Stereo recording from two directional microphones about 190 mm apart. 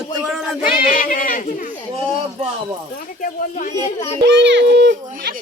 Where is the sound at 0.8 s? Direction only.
45° left (ahead or behind).